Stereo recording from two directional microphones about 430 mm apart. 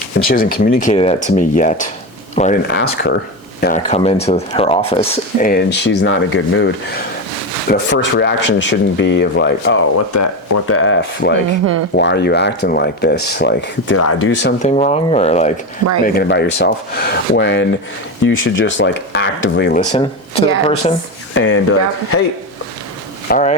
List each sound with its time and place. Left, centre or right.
0.3 s speech: left
14.3 s speech: centre
19.8 s speech: centre
21.3 s speech: left
23.3 s speech: centre